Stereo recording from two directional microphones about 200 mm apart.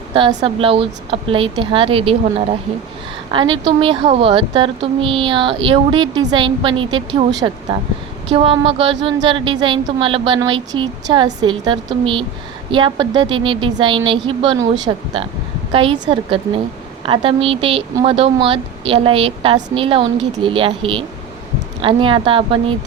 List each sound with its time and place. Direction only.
0.1 s speech: 25° right (ahead or behind)